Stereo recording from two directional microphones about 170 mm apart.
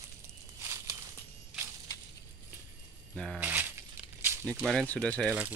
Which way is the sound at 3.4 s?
10° right (ahead or behind).